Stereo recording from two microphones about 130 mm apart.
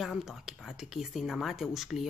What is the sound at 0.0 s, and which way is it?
Speech, 5° right (ahead or behind).